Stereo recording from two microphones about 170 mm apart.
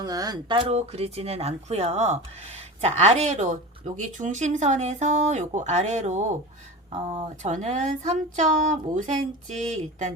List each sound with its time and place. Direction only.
0.0 s speech: 20° right (ahead or behind); by 6.3 s 45° right (ahead or behind)
6.9 s speech: 30° right (ahead or behind)
7.4 s speech: 45° right (ahead or behind)